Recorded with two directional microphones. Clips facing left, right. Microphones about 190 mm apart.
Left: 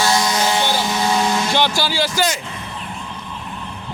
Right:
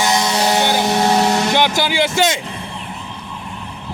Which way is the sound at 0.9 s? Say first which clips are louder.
Right 5 dB; 55° right (ahead or behind).